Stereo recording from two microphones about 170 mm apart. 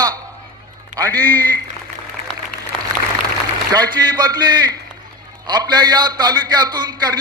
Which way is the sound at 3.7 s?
25° right (ahead or behind).